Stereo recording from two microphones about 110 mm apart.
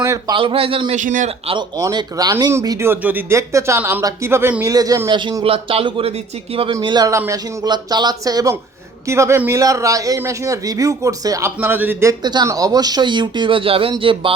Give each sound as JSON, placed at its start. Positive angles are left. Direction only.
{"t": 0.3, "sound": "speech", "side_deg": -55}
{"t": 1.8, "sound": "speech", "side_deg": -35}
{"t": 2.6, "sound": "speech", "side_deg": -25}
{"t": 4.6, "sound": "speech", "side_deg": -35}
{"t": 5.0, "sound": "speech", "side_deg": -45}
{"t": 5.4, "sound": "speech", "side_deg": -60}
{"t": 6.8, "sound": "speech", "side_deg": -40}
{"t": 12.2, "sound": "speech", "side_deg": -40}